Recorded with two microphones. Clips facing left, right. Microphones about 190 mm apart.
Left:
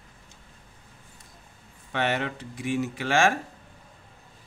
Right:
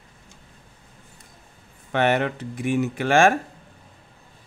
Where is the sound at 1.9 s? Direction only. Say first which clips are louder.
Right 6 dB; 55° right (ahead or behind).